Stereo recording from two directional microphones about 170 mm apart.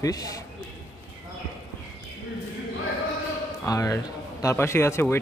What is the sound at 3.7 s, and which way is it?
Speech, 20° left (ahead or behind).